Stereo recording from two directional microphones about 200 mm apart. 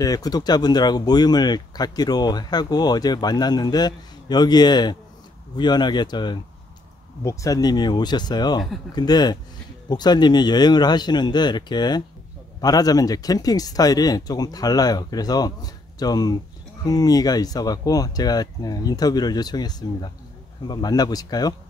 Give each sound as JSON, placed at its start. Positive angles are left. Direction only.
{"t": 0.0, "sound": "speech", "side_deg": 20}